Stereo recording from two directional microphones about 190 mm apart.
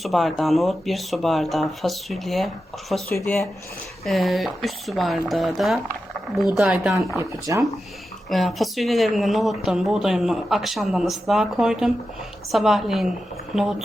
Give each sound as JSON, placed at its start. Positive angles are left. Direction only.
{"t": 0.0, "sound": "speech", "side_deg": 0}
{"t": 3.2, "sound": "speech", "side_deg": 15}
{"t": 4.0, "sound": "speech", "side_deg": 0}
{"t": 7.2, "sound": "speech", "side_deg": -15}
{"t": 8.3, "sound": "speech", "side_deg": 0}